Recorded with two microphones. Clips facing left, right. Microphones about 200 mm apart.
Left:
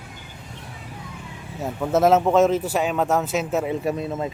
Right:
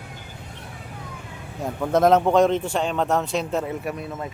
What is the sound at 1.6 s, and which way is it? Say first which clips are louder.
Speech: even; 5° left (ahead or behind).